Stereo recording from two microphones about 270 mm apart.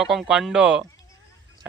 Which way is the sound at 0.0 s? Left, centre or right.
Centre.